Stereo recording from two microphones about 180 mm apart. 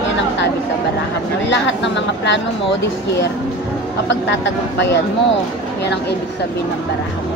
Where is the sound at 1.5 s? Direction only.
85° left.